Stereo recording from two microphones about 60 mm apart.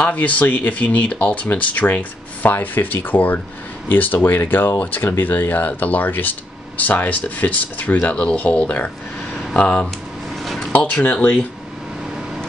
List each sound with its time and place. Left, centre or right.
0.0 s speech: left
10.4 s a sound: centre
10.9 s speech: left